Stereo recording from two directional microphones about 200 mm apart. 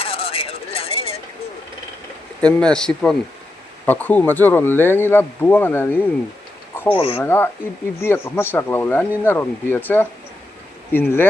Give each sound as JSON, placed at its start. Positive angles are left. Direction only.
{"t": 0.0, "sound": "a sound", "side_deg": 30}
{"t": 2.4, "sound": "speech", "side_deg": 5}
{"t": 6.9, "sound": "speech", "side_deg": 30}
{"t": 7.3, "sound": "speech", "side_deg": 10}